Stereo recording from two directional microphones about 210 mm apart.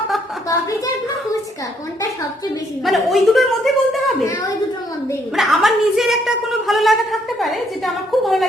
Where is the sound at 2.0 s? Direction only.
15° left (ahead or behind).